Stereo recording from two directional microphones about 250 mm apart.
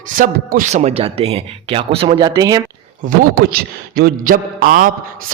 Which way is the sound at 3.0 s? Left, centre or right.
Right.